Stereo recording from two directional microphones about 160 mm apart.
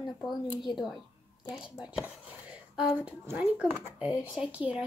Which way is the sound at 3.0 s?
10° right (ahead or behind).